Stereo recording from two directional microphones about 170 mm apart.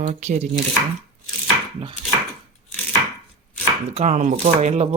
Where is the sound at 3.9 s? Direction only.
45° right (ahead or behind).